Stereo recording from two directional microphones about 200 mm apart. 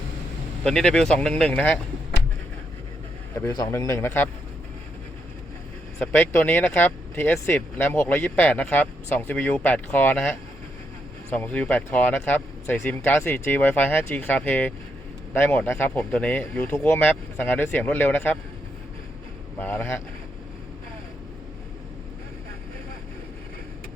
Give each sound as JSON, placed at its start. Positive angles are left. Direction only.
{"t": 0.6, "sound": "speech", "side_deg": 5}
{"t": 3.3, "sound": "speech", "side_deg": 15}
{"t": 6.0, "sound": "speech", "side_deg": 10}
{"t": 19.5, "sound": "speech", "side_deg": 10}